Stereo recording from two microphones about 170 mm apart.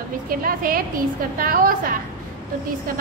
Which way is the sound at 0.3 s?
55° right (ahead or behind).